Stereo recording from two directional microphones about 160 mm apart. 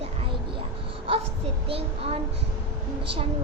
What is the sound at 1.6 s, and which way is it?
Speech, 35° right (ahead or behind).